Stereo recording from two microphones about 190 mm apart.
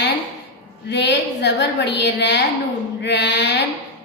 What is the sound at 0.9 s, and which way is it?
A woman's voice, 65° left (ahead or behind).